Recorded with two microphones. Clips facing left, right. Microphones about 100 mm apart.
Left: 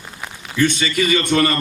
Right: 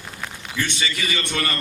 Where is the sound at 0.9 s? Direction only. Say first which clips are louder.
Left 9 dB; 55° left (ahead or behind).